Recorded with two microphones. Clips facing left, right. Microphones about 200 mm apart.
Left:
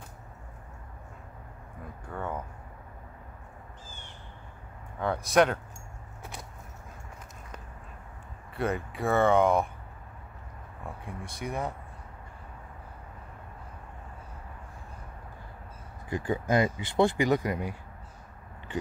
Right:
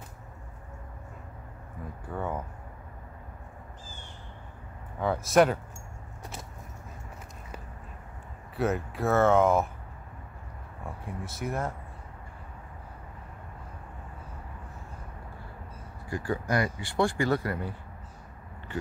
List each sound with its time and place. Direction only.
2.0 s speech: 10° right (ahead or behind)
5.0 s speech: centre (ahead or behind)
8.5 s speech: 5° right (ahead or behind)
11.1 s speech: centre (ahead or behind)
16.1 s speech: 20° left (ahead or behind)